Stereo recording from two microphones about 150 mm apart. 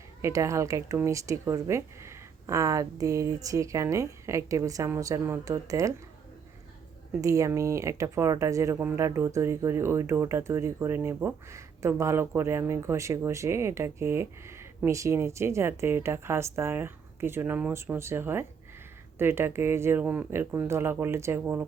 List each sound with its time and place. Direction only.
0.2 s speech: 20° right (ahead or behind)
7.2 s speech: 20° right (ahead or behind)